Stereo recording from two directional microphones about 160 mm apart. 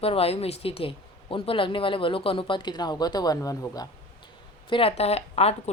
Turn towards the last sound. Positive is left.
turn(degrees=40)  # may be behind; listen again after turning